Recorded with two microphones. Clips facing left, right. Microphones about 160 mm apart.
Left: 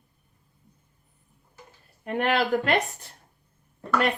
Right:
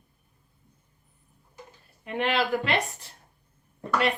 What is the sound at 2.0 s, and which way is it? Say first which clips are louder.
Speech: left 2 dB; 50° left (ahead or behind).